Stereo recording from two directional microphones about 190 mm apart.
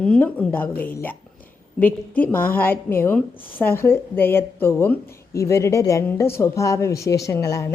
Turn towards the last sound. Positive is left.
turn(degrees=15)  # may be behind; listen again after turning